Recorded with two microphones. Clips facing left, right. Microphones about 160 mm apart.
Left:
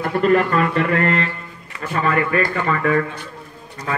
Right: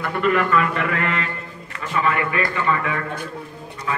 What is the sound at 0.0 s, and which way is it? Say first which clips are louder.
A man's voice: left 4 dB; 40° left (ahead or behind).